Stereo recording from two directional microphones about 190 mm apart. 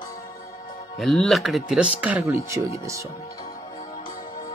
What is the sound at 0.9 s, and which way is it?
A man's voice, centre (ahead or behind).